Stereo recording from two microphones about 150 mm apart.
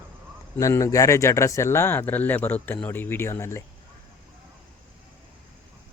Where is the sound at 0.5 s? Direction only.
20° left (ahead or behind).